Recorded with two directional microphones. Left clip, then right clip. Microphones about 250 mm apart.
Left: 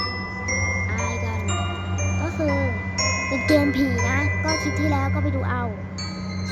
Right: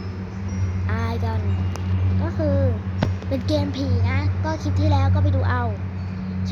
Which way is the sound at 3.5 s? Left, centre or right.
Centre.